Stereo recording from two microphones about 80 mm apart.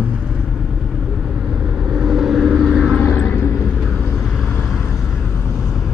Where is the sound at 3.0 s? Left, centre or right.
Centre.